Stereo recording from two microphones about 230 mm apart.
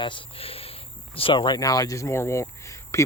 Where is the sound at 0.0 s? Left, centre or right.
Left.